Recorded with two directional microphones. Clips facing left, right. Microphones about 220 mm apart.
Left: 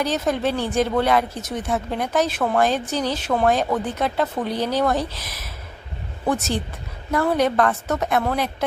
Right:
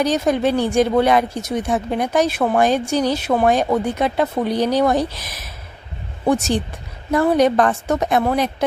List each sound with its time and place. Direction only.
0.0 s speech: 15° right (ahead or behind)
7.1 s speech: 15° right (ahead or behind)